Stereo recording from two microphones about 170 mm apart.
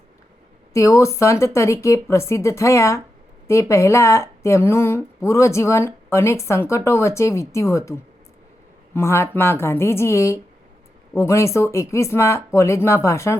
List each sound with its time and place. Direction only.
0.7 s speech: 20° left (ahead or behind)